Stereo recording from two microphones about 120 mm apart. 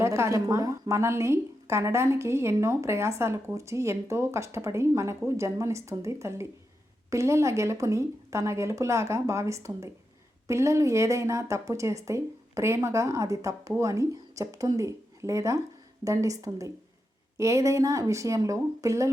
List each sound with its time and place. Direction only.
0.0 s a woman's voice: 25° right (ahead or behind)